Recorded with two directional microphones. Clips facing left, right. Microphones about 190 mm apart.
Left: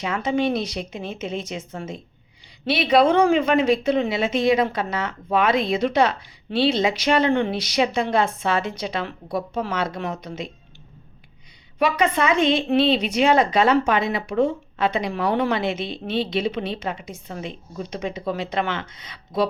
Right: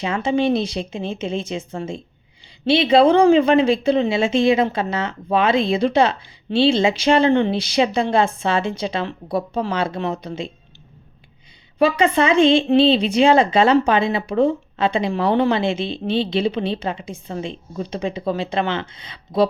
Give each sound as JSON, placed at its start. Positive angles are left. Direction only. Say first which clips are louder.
{"t": 0.0, "sound": "a woman's voice", "louder": "right 3 dB", "side_deg": -30}
{"t": 11.8, "sound": "a woman's voice", "louder": "right 4 dB", "side_deg": -30}